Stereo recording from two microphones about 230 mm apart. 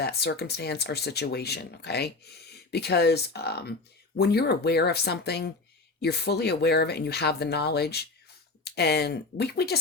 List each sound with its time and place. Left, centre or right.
0.0 s speech: left